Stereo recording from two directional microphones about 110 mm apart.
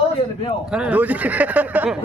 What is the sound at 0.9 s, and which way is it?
Speech, 15° right (ahead or behind).